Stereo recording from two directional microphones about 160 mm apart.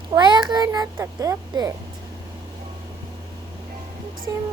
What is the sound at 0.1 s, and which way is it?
Child singing, 30° right (ahead or behind).